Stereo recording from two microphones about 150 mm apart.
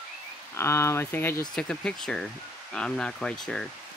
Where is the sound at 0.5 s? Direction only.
20° left (ahead or behind).